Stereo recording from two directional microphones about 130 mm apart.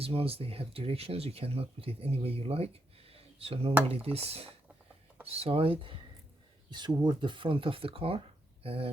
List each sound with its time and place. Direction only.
0.0 s speech: 50° right (ahead or behind)
3.1 s a sound: 50° right (ahead or behind)
3.8 s speech: 50° right (ahead or behind)